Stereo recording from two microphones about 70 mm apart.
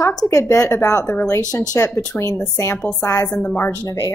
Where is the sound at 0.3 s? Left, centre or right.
Left.